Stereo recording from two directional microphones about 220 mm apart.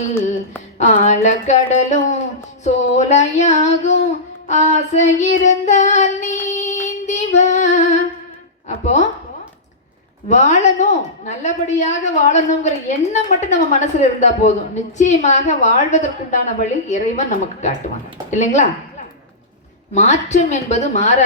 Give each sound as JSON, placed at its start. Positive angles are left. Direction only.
{"t": 0.8, "sound": "a woman's voice", "side_deg": 35}
{"t": 2.6, "sound": "a sound", "side_deg": 30}
{"t": 10.2, "sound": "a woman's voice", "side_deg": 30}
{"t": 19.9, "sound": "a woman's voice", "side_deg": 30}